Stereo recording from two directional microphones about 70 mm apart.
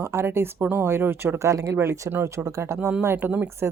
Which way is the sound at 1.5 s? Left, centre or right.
Right.